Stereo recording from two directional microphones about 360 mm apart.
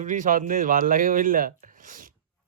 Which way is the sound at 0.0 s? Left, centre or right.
Right.